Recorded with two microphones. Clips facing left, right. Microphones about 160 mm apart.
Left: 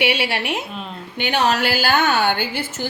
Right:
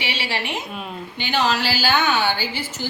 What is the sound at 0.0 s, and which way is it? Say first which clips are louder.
A woman's voice: left 6 dB; 60° left (ahead or behind).